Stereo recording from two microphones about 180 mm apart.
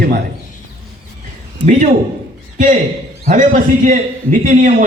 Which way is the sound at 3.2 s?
45° right (ahead or behind).